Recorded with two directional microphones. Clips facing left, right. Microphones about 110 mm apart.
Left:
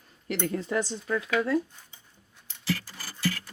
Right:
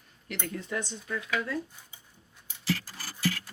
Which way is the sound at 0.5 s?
35° left (ahead or behind).